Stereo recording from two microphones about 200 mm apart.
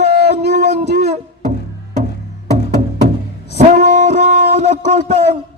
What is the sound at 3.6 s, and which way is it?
Music, 35° right (ahead or behind).